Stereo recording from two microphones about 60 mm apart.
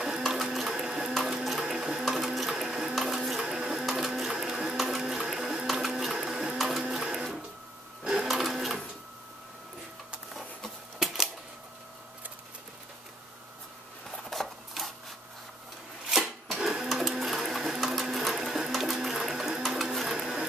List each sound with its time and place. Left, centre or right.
0.0 s printer: centre
1.2 s sewing machine: centre
5.7 s printer: centre
8.0 s sewing machine: centre
10.3 s a sound: centre
14.3 s a sound: centre
16.1 s sewing machine: centre